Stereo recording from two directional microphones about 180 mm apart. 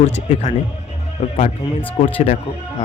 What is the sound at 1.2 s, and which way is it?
Speech, 35° left (ahead or behind).